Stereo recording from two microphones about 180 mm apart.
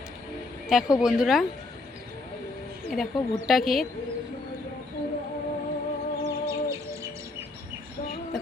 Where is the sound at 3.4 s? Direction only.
Centre (ahead or behind).